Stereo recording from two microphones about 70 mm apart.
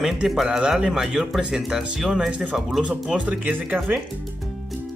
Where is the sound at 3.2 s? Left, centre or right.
Right.